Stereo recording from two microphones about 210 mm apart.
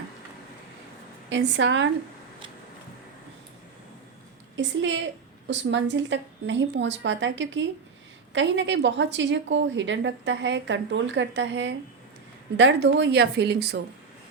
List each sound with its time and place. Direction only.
1.3 s a woman's voice: 60° right (ahead or behind)
4.5 s a woman's voice: 60° right (ahead or behind)